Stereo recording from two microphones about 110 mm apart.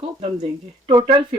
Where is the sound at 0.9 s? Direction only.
40° right (ahead or behind).